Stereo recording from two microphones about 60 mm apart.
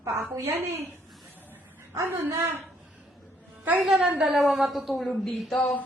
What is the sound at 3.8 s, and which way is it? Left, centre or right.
A woman's voice, centre.